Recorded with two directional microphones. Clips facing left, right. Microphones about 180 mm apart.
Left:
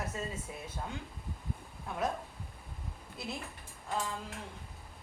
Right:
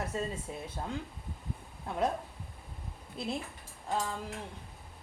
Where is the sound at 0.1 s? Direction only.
30° right (ahead or behind).